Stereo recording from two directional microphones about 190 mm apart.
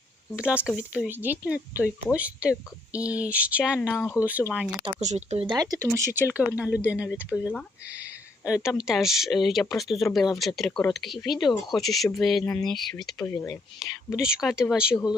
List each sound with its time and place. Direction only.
0.3 s speech: 5° right (ahead or behind)
4.9 s speech: 35° right (ahead or behind); by 13.3 s 5° left (ahead or behind)
13.3 s speech: 20° left (ahead or behind)
13.7 s speech: centre (ahead or behind)